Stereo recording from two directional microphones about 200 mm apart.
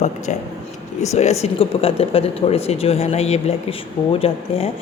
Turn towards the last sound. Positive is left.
turn(degrees=30)  # may be behind; listen again after turning